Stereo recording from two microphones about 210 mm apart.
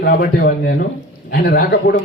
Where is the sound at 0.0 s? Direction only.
45° left (ahead or behind).